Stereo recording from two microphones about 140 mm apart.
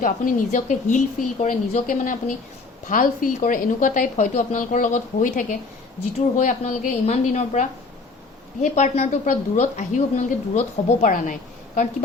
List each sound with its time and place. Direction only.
0.0 s speech: 70° left (ahead or behind)
11.0 s a woman's voice: 65° left (ahead or behind)